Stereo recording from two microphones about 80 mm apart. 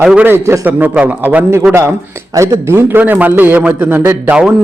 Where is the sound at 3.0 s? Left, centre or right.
Right.